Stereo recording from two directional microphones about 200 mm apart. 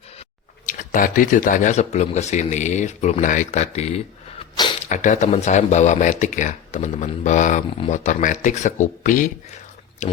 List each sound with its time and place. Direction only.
0.7 s speech: 45° left (ahead or behind)
3.8 s a sound: 30° left (ahead or behind)
4.8 s speech: 35° left (ahead or behind)